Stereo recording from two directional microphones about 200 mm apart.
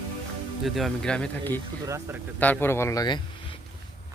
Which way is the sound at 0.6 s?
Centre (ahead or behind).